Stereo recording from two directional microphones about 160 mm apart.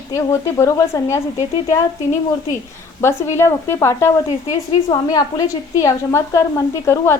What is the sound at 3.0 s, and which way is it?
A woman's voice, 15° left (ahead or behind).